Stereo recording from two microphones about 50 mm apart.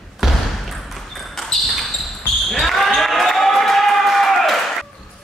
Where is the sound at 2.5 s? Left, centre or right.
Centre.